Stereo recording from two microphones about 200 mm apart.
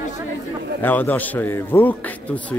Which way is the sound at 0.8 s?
10° left (ahead or behind).